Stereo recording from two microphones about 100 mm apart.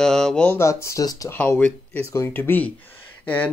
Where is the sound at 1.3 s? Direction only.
20° left (ahead or behind).